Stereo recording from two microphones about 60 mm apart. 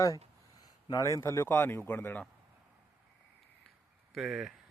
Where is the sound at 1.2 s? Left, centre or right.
Left.